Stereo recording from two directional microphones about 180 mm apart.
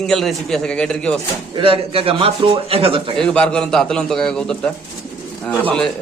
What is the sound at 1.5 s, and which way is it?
A man's voice, 30° right (ahead or behind).